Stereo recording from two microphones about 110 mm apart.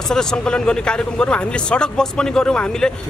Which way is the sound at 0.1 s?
5° left (ahead or behind).